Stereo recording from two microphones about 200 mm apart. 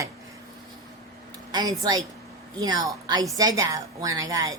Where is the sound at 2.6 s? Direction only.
20° right (ahead or behind).